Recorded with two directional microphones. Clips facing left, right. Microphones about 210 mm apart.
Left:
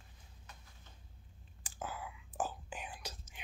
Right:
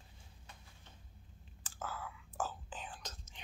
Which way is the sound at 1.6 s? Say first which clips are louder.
Left 1 dB; 15° left (ahead or behind).